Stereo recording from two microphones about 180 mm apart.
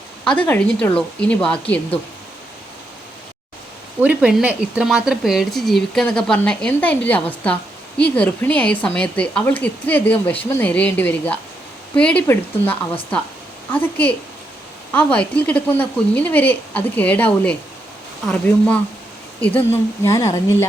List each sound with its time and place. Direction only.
0.3 s speech: 10° left (ahead or behind)
4.0 s speech: 5° right (ahead or behind); by 20.7 s 15° left (ahead or behind)